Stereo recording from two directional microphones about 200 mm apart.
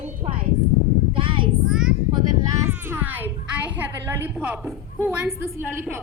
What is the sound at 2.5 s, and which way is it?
A child's voice, 10° right (ahead or behind).